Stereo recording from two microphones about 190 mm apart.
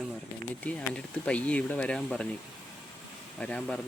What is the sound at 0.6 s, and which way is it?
Speech, 5° left (ahead or behind).